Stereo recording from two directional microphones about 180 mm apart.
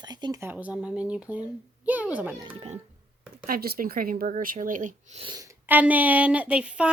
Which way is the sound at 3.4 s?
55° right (ahead or behind).